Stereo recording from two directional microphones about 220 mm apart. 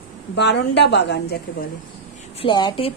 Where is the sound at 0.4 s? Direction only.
50° left (ahead or behind).